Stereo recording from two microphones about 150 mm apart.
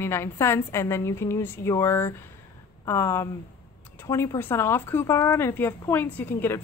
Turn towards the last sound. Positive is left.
turn(degrees=15)  # may be behind; listen again after turning